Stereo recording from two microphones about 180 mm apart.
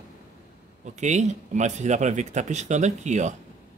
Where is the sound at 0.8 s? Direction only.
40° right (ahead or behind).